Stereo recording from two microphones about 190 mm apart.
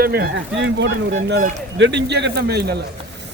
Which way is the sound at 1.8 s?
65° right (ahead or behind).